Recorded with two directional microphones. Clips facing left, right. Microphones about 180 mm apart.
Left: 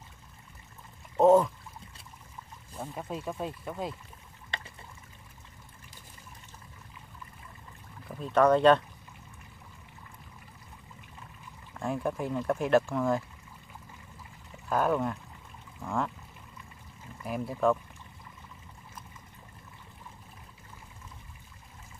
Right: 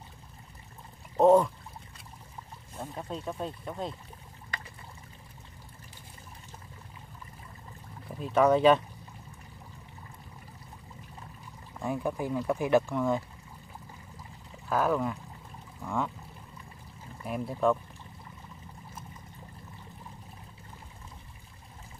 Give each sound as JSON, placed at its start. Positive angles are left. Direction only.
{"t": 1.1, "sound": "speech", "side_deg": 0}
{"t": 2.8, "sound": "speech", "side_deg": 5}
{"t": 4.5, "sound": "pour", "side_deg": 25}
{"t": 8.1, "sound": "speech", "side_deg": -5}
{"t": 11.8, "sound": "speech", "side_deg": 0}
{"t": 14.7, "sound": "speech", "side_deg": 0}
{"t": 17.2, "sound": "speech", "side_deg": 0}